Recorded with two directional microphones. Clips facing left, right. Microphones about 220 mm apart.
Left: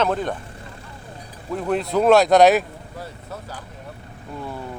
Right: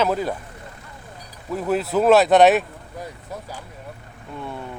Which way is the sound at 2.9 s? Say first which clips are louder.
Right 2 dB; 15° right (ahead or behind).